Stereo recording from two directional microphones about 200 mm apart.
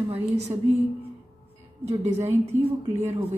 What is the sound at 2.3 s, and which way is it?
Speech, 10° right (ahead or behind).